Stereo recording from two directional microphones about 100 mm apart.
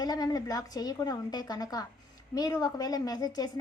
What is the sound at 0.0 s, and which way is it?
A woman's voice, 40° left (ahead or behind).